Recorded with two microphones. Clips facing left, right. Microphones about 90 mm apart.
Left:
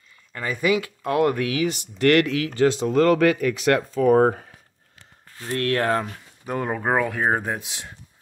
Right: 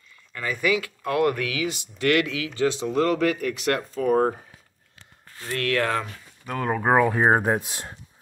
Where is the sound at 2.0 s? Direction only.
45° left (ahead or behind); by 4.4 s 90° left.